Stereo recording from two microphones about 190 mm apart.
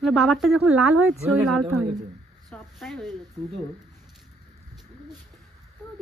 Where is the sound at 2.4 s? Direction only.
Centre (ahead or behind).